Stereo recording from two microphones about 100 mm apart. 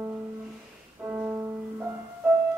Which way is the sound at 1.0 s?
20° right (ahead or behind).